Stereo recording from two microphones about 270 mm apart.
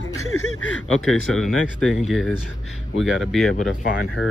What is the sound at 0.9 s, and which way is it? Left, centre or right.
Speech, centre.